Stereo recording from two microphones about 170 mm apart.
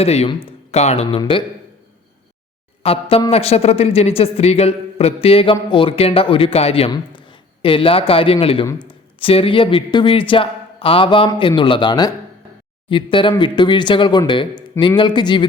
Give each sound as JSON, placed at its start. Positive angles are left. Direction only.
{"t": 0.0, "sound": "a man's voice", "side_deg": 35}
{"t": 1.2, "sound": "speech", "side_deg": 30}
{"t": 2.8, "sound": "a man's voice", "side_deg": 35}